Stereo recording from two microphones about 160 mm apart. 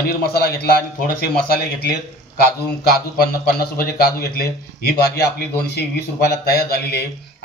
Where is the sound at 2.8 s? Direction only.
75° left (ahead or behind).